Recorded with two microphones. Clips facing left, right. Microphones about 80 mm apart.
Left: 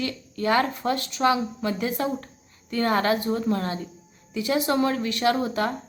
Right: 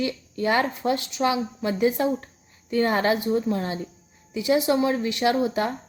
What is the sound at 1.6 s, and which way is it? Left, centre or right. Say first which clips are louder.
Speech: right 4 dB; right.